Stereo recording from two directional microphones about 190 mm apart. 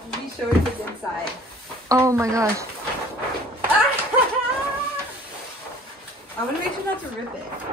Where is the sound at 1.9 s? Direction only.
15° right (ahead or behind).